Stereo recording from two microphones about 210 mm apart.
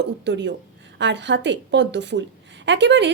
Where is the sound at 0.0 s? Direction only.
55° right (ahead or behind).